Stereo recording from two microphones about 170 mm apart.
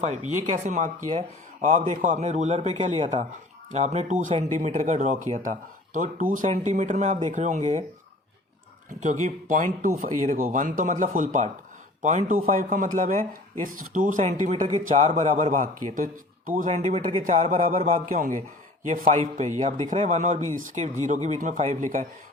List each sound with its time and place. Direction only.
0.0 s a man's voice: 45° right (ahead or behind)
2.0 s a man's voice: 50° right (ahead or behind)
8.9 s a man's voice: 45° right (ahead or behind)
17.2 s a man's voice: 50° right (ahead or behind)